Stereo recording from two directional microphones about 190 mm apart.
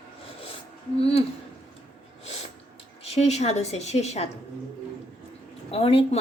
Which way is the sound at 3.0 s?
35° left (ahead or behind).